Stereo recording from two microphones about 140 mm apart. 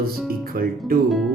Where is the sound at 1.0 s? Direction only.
Centre (ahead or behind).